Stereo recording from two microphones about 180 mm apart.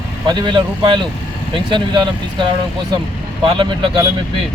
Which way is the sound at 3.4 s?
30° right (ahead or behind).